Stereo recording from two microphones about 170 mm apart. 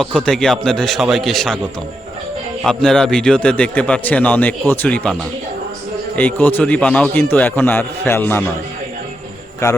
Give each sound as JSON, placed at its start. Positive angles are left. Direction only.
{"t": 0.0, "sound": "a man's voice", "side_deg": 5}
{"t": 2.6, "sound": "a man's voice", "side_deg": 5}
{"t": 6.1, "sound": "a man's voice", "side_deg": 10}
{"t": 9.6, "sound": "a man's voice", "side_deg": 20}